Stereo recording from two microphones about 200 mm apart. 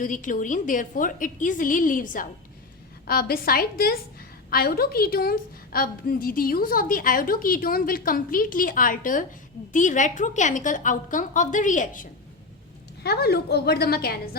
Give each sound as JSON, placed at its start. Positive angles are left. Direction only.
{"t": 0.0, "sound": "a woman's voice", "side_deg": 40}
{"t": 13.0, "sound": "a woman's voice", "side_deg": 55}